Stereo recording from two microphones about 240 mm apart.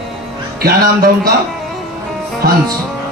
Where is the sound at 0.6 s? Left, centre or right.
Right.